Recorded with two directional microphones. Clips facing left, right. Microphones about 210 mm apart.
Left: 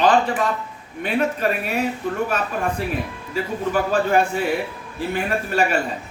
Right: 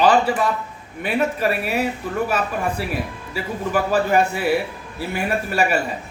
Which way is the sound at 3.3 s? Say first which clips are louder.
Left 1 dB; 10° right (ahead or behind).